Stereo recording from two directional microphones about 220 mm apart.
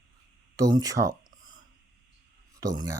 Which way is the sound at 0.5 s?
15° right (ahead or behind).